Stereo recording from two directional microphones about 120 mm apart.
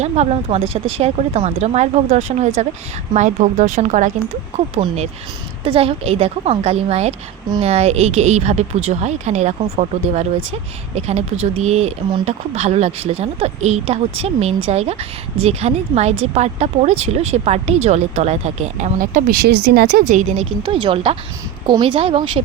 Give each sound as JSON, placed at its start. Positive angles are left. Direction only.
{"t": 0.0, "sound": "speech", "side_deg": -65}
{"t": 3.1, "sound": "speech", "side_deg": -90}
{"t": 4.5, "sound": "speech", "side_deg": -60}
{"t": 20.1, "sound": "speech", "side_deg": -75}
{"t": 20.6, "sound": "a woman's voice", "side_deg": -40}